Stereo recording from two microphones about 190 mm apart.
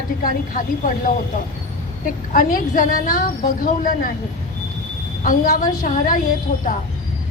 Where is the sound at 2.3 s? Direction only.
45° left (ahead or behind).